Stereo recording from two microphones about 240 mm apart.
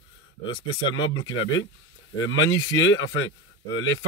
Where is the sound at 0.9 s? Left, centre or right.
Left.